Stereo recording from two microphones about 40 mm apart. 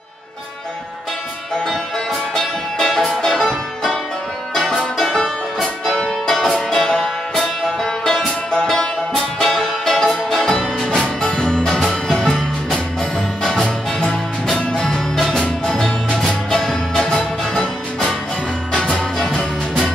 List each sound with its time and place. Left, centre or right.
2.3 s music: centre
18.7 s music: left
19.1 s music: centre